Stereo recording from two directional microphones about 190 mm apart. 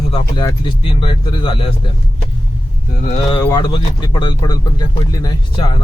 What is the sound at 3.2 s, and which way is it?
Speech, 20° left (ahead or behind).